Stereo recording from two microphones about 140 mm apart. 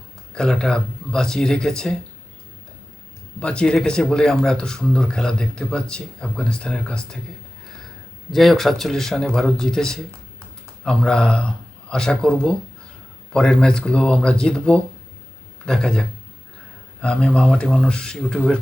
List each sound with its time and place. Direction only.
0.3 s speech: 5° left (ahead or behind)
3.4 s speech: 5° left (ahead or behind)
8.3 s speech: centre (ahead or behind)